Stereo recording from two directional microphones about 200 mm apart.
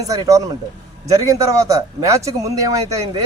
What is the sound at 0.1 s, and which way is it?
Speech, 15° right (ahead or behind).